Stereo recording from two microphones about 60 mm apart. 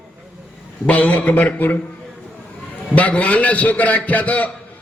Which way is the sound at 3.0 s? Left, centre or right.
Left.